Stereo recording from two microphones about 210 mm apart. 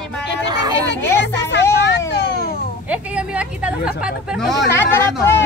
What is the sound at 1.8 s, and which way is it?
Vehicle, 55° left (ahead or behind).